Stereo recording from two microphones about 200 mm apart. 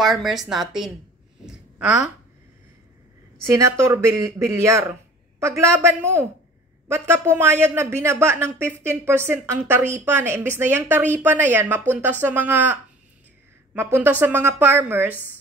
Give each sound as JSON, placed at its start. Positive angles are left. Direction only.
{"t": 0.0, "sound": "a woman's voice", "side_deg": 0}
{"t": 1.4, "sound": "a sound", "side_deg": -5}
{"t": 3.4, "sound": "a woman's voice", "side_deg": -15}
{"t": 14.2, "sound": "a woman's voice", "side_deg": -10}